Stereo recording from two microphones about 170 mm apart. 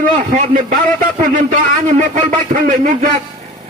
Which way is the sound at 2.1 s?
50° right (ahead or behind).